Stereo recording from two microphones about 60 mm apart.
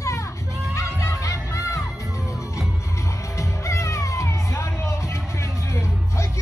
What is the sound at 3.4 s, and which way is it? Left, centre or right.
Music, left.